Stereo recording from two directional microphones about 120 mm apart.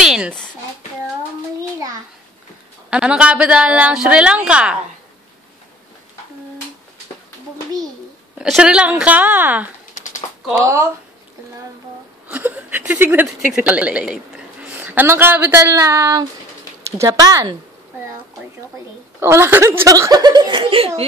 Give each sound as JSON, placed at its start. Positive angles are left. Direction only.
{"t": 0.0, "sound": "a sound", "side_deg": -5}
{"t": 2.9, "sound": "a woman's voice", "side_deg": -10}
{"t": 8.4, "sound": "a woman's voice", "side_deg": -5}
{"t": 9.9, "sound": "a sound", "side_deg": 90}
{"t": 10.5, "sound": "speech", "side_deg": -25}
{"t": 12.3, "sound": "a woman's voice", "side_deg": -15}
{"t": 19.1, "sound": "speech", "side_deg": -20}